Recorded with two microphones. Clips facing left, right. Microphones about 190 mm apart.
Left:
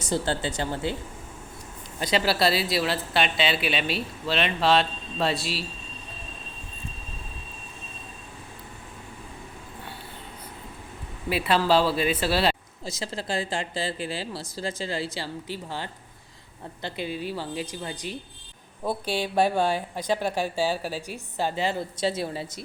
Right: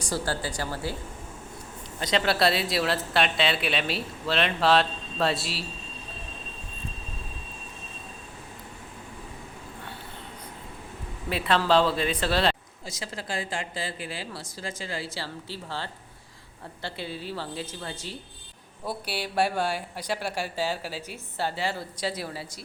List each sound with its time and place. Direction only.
0.0 s a woman's voice: 25° left (ahead or behind)
2.0 s speech: 10° left (ahead or behind)
11.3 s a woman's voice: 10° left (ahead or behind)
12.8 s a woman's voice: 30° left (ahead or behind)
19.2 s a woman's voice: 20° left (ahead or behind)